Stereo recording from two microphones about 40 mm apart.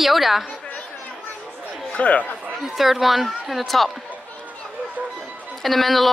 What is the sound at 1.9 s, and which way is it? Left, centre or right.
Speech, left.